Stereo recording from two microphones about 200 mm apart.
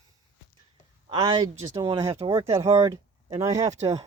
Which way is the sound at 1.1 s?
20° right (ahead or behind).